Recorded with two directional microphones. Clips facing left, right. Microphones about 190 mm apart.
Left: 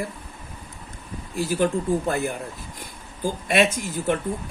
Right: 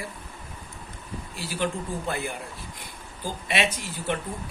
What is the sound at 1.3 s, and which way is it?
Speech, 45° left (ahead or behind).